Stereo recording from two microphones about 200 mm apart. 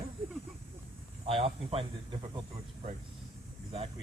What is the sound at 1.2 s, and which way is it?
Speech, 30° right (ahead or behind).